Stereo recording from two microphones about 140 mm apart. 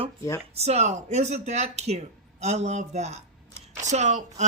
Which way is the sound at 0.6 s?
50° right (ahead or behind).